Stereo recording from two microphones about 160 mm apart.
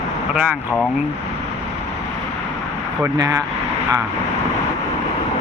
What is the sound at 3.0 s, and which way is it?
Speech, 20° right (ahead or behind).